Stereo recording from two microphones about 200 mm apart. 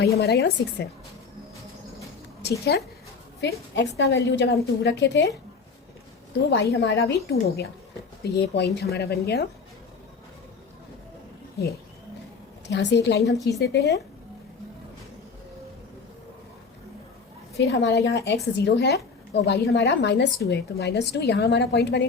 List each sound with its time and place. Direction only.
0.2 s a woman's voice: 55° left (ahead or behind)
3.4 s a woman's voice: 60° left (ahead or behind)
6.5 s speech: 55° left (ahead or behind)
12.7 s a woman's voice: 60° left (ahead or behind)
13.3 s a woman's voice: 15° left (ahead or behind)
13.6 s a woman's voice: 60° left (ahead or behind)
17.7 s a woman's voice: 55° left (ahead or behind)